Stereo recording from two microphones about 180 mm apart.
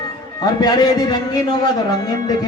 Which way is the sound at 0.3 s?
20° left (ahead or behind).